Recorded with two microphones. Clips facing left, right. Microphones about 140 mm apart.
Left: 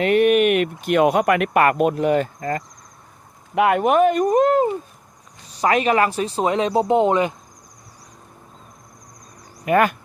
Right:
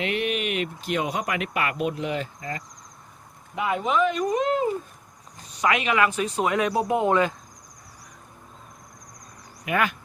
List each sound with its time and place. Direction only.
0.0 s speech: 50° left (ahead or behind)
3.5 s speech: 65° left (ahead or behind); by 4.6 s 45° left (ahead or behind)
5.5 s speech: 35° left (ahead or behind); by 7.3 s 20° left (ahead or behind)
9.6 s speech: 45° left (ahead or behind)